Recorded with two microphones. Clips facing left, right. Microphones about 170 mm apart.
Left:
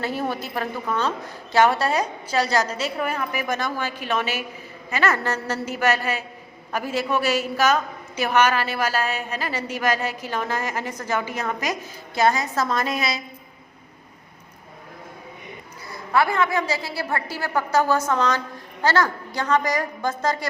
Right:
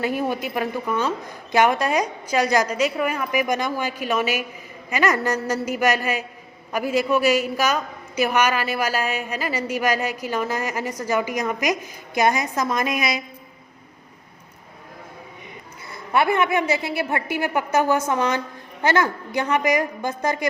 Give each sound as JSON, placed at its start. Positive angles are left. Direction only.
{"t": 0.0, "sound": "a man's voice", "side_deg": -10}
{"t": 15.9, "sound": "a woman's voice", "side_deg": -25}